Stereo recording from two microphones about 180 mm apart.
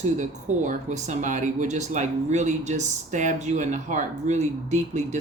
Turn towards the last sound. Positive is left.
turn(degrees=-40)  # may be behind; listen again after turning